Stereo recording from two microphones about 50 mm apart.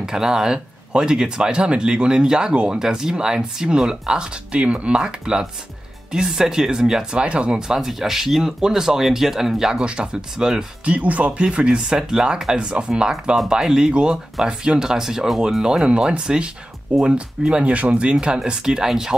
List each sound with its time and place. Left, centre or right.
0.0 s speech: centre
7.5 s speech: centre
9.8 s speech: centre
10.9 s speech: right
11.4 s speech: centre